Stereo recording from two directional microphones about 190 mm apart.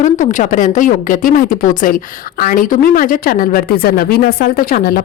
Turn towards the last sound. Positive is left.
turn(degrees=50)  # may be behind; listen again after turning